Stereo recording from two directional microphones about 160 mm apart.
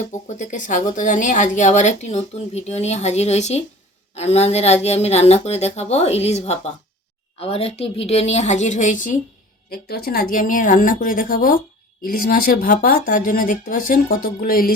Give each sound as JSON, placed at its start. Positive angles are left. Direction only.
{"t": 0.1, "sound": "speech", "side_deg": 50}
{"t": 9.6, "sound": "speech", "side_deg": 75}